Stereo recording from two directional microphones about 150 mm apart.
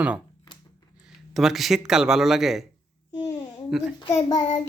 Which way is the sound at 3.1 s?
30° left (ahead or behind).